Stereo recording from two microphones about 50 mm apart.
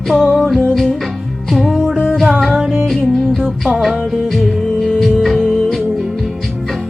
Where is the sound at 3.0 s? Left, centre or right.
Centre.